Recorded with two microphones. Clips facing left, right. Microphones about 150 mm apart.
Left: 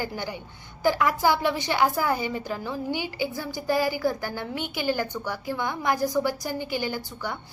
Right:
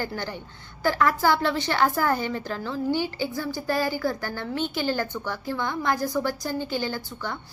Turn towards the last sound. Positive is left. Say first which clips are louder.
# even
turn(degrees=15)  # may be behind; listen again after turning